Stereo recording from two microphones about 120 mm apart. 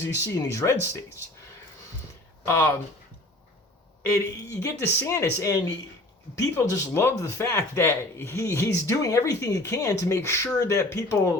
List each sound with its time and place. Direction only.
0.0 s speech: 25° left (ahead or behind)
2.4 s speech: 20° left (ahead or behind)
4.1 s speech: 25° left (ahead or behind)